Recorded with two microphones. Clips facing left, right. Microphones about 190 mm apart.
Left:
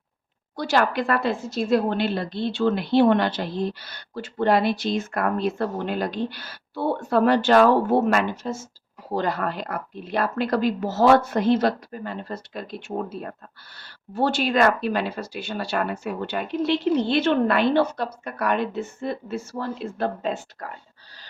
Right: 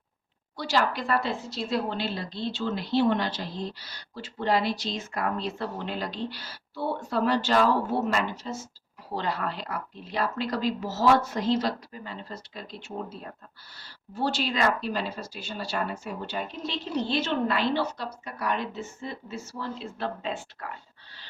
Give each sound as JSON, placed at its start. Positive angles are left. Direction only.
{"t": 0.5, "sound": "a woman's voice", "side_deg": 50}